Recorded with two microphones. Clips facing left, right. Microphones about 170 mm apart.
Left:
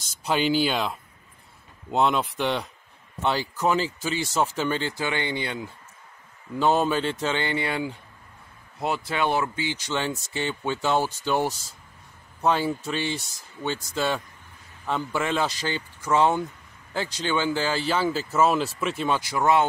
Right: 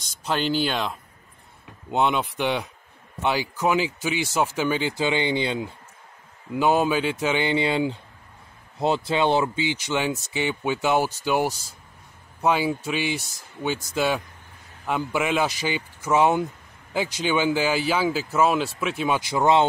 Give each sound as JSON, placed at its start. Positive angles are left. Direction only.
{"t": 0.0, "sound": "speech", "side_deg": 10}
{"t": 6.5, "sound": "speech", "side_deg": -5}
{"t": 19.1, "sound": "speech", "side_deg": -20}